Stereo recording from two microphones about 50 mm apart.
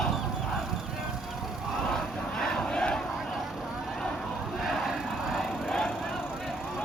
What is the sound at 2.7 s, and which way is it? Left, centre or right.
Battle cry, centre.